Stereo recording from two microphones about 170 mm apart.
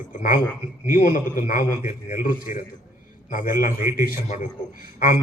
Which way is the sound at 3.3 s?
55° left (ahead or behind).